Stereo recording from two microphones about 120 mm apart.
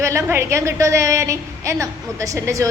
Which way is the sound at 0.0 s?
25° right (ahead or behind).